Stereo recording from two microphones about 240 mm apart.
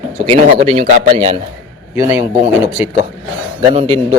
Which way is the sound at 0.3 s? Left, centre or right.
Right.